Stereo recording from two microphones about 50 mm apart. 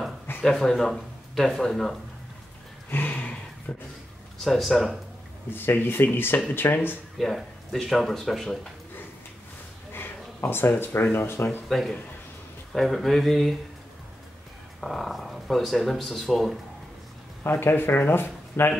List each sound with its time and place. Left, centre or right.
0.4 s speech: centre
2.9 s a sound: left
3.7 s a sound: left
4.4 s speech: centre
5.5 s speech: left
7.2 s speech: centre
9.9 s speech: left
11.7 s speech: centre
14.8 s speech: centre
17.4 s speech: left